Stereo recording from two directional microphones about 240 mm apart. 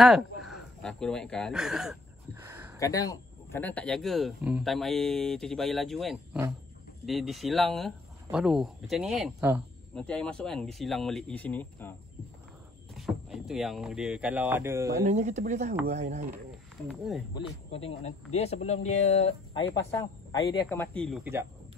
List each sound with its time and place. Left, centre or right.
0.0 s speech: centre
2.4 s a sound: centre
2.8 s speech: centre
12.9 s speech: centre
15.0 s speech: right
16.8 s speech: centre
17.3 s speech: left
19.7 s speech: centre
21.2 s speech: centre